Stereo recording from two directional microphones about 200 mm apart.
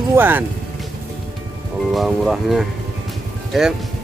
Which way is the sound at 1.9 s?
Centre (ahead or behind).